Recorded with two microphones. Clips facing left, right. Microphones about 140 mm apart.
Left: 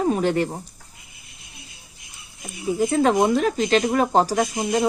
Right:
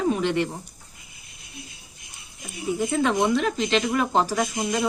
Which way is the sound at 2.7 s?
40° left (ahead or behind).